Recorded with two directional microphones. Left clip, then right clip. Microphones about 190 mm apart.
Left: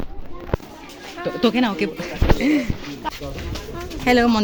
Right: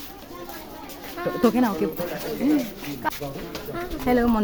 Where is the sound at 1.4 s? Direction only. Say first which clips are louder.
Left 2 dB; 10° left (ahead or behind).